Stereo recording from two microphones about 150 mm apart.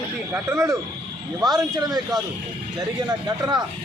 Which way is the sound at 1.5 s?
25° right (ahead or behind).